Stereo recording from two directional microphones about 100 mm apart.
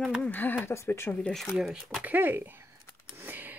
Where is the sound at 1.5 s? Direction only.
5° right (ahead or behind).